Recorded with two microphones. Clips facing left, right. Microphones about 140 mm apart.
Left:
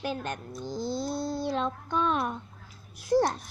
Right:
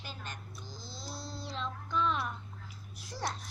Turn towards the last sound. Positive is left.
turn(degrees=55)  # may be behind; listen again after turning